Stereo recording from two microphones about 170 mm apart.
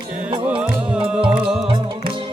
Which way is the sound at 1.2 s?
30° right (ahead or behind).